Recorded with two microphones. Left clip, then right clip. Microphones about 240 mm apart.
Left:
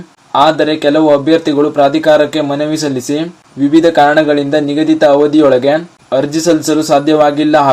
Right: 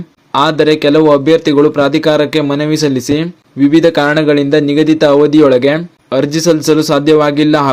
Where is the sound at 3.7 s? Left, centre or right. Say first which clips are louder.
Left 3 dB; right.